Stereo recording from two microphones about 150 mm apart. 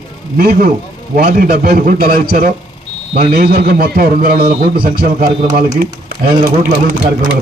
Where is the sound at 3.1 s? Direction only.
85° right.